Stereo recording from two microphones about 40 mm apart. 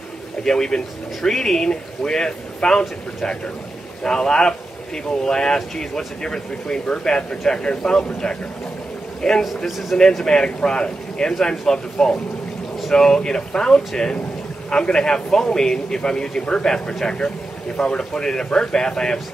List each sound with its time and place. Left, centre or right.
0.4 s speech: centre
4.0 s speech: centre
9.2 s speech: centre
10.2 s speech: centre